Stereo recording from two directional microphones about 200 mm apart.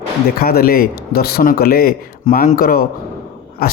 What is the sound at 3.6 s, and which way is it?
Dog, 50° left (ahead or behind).